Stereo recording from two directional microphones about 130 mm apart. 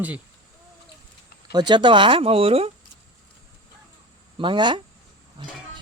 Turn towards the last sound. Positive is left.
turn(degrees=-35)  # may be behind; listen again after turning